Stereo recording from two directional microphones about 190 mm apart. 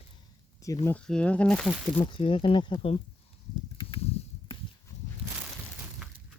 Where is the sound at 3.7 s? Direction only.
25° left (ahead or behind).